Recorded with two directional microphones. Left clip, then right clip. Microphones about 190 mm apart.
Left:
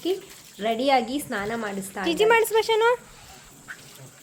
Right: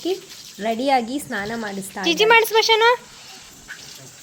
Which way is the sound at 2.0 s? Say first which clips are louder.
Right 5 dB; 15° left (ahead or behind).